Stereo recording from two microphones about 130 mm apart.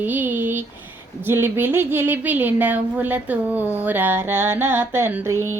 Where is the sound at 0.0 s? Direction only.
15° right (ahead or behind).